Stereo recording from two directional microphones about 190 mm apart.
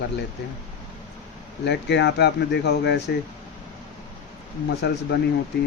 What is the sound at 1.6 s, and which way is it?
Speech, 65° left (ahead or behind).